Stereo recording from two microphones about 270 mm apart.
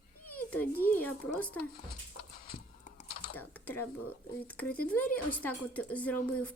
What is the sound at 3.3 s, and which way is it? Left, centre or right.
Speech, centre.